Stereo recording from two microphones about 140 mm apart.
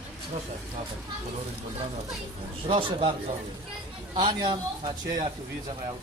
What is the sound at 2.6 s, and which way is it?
Speech, 40° right (ahead or behind).